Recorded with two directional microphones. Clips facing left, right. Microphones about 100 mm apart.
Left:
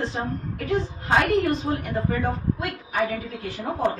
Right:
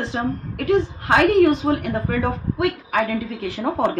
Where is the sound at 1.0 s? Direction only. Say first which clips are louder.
Right 6 dB; 80° right.